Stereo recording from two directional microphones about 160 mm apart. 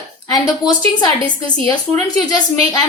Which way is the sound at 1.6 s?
25° left (ahead or behind).